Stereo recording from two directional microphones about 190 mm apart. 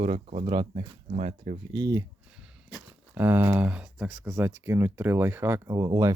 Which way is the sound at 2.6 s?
10° right (ahead or behind).